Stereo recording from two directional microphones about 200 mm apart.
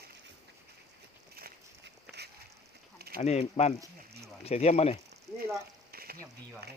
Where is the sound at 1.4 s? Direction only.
50° right (ahead or behind).